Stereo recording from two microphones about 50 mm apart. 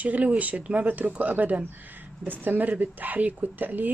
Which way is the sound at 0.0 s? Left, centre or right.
Right.